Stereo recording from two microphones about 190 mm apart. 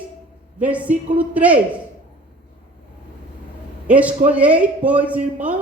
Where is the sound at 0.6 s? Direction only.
5° right (ahead or behind).